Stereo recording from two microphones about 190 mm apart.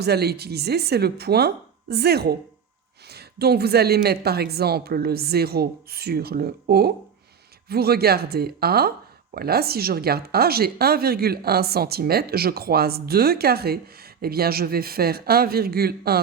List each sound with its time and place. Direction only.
0.0 s speech: 60° right (ahead or behind)